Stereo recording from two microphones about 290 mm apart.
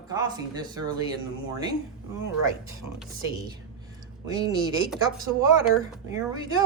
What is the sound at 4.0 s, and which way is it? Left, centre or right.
Speech, centre.